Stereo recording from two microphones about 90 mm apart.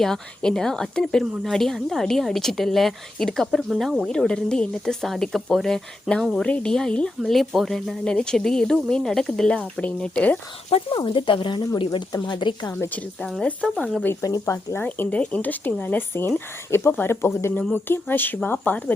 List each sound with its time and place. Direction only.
0.0 s a woman's voice: 5° left (ahead or behind)
10.8 s speech: 75° left (ahead or behind)
13.7 s a woman's voice: 10° left (ahead or behind)
14.2 s speech: 40° left (ahead or behind); by 18.9 s 20° left (ahead or behind)